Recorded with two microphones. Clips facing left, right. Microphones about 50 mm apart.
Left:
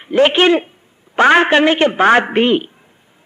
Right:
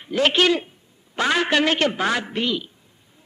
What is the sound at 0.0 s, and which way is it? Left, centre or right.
A woman's voice, left.